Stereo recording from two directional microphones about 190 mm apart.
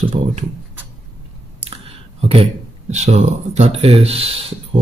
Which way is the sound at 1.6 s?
30° right (ahead or behind).